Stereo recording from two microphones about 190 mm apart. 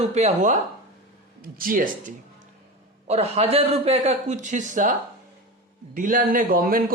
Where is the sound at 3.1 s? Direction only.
30° right (ahead or behind); by 6.9 s 50° right (ahead or behind).